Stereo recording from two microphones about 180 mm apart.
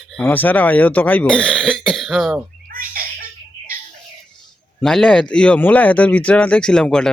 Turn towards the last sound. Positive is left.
turn(degrees=5)  # may be behind; listen again after turning